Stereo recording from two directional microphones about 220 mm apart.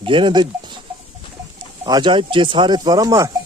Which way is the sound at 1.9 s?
20° right (ahead or behind).